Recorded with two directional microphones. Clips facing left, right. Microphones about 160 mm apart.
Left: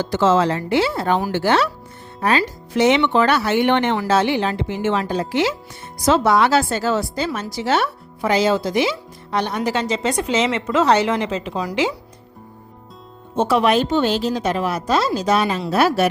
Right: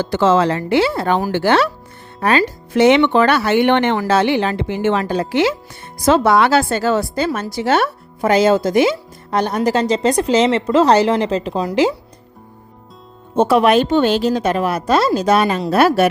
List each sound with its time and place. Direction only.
0.0 s speech: 60° right (ahead or behind)
7.3 s speech: 40° right (ahead or behind)
7.5 s speech: 55° right (ahead or behind); by 11.9 s 35° right (ahead or behind)
13.3 s speech: 55° right (ahead or behind)